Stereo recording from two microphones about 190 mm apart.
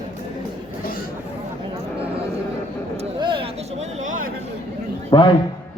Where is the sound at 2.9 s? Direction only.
25° right (ahead or behind); by 4.3 s 45° right (ahead or behind).